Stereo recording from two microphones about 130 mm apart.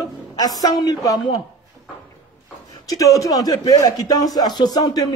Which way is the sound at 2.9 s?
25° left (ahead or behind).